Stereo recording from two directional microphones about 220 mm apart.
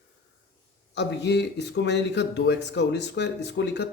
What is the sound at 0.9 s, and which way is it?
Speech, 50° left (ahead or behind).